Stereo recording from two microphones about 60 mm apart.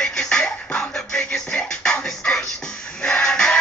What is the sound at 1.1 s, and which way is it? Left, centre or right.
Music, centre.